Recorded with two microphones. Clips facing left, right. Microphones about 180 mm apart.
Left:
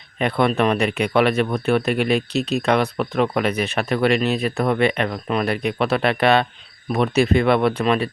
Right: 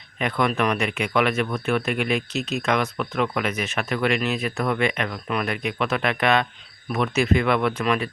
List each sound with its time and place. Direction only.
0.2 s speech: 35° left (ahead or behind)